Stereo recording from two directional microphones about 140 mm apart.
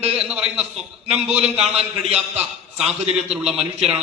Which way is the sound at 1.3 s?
50° right (ahead or behind).